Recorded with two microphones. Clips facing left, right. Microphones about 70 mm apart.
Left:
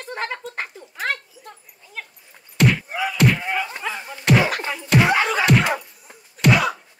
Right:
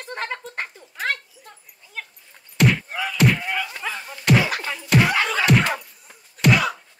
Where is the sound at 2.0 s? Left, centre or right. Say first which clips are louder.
Even; centre.